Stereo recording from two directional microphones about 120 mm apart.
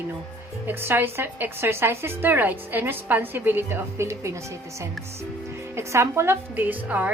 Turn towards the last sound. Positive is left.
turn(degrees=-15)  # may be behind; listen again after turning